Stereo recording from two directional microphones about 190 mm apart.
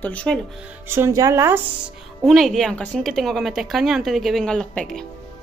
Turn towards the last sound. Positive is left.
turn(degrees=5)  # may be behind; listen again after turning